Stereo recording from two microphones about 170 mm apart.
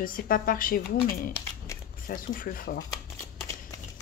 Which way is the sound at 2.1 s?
55° left (ahead or behind).